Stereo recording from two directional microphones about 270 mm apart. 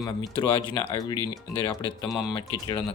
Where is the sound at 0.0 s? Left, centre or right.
Centre.